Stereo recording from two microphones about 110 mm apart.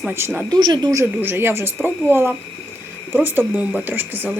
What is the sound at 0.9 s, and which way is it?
A woman's voice, 25° right (ahead or behind).